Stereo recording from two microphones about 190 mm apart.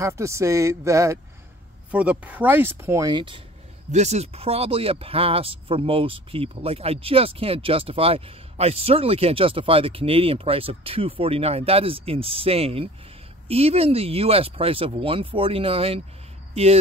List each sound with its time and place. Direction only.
0.0 s speech: 15° right (ahead or behind)
3.9 s speech: 35° right (ahead or behind)